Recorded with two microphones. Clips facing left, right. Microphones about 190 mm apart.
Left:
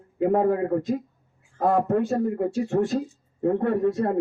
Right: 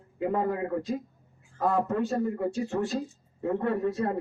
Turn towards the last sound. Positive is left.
turn(degrees=50)  # may be behind; listen again after turning